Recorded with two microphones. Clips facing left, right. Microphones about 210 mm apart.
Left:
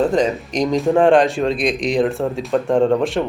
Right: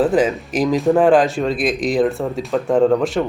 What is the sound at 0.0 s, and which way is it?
Speech, 5° right (ahead or behind).